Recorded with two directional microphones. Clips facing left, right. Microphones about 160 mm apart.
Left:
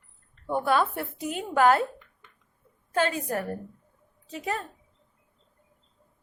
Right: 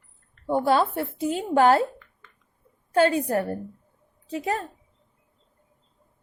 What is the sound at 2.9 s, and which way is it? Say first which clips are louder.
A woman's voice: right 6 dB; 30° right (ahead or behind).